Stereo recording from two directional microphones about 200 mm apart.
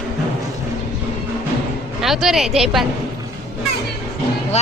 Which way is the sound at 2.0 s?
Centre (ahead or behind).